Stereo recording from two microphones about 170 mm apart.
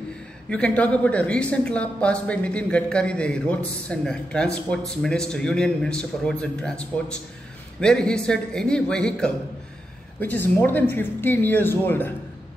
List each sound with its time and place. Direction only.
0.5 s a man's voice: 5° left (ahead or behind)